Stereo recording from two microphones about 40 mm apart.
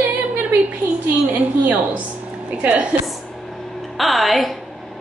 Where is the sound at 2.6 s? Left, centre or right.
Right.